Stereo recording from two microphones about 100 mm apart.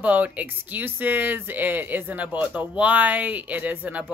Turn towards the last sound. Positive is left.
turn(degrees=-15)  # may be behind; listen again after turning